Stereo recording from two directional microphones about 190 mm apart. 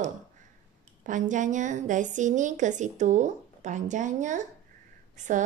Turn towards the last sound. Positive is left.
turn(degrees=-40)  # may be behind; listen again after turning